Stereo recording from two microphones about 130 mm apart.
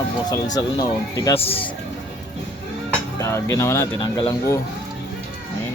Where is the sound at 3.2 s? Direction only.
20° left (ahead or behind).